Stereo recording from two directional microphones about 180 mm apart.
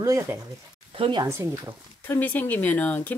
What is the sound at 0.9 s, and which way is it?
Speech, 30° right (ahead or behind).